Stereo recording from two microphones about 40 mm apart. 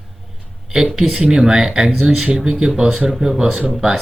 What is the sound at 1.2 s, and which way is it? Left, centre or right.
Speech, centre.